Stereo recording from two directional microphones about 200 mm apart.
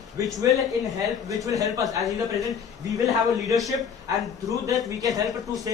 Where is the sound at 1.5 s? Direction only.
15° right (ahead or behind).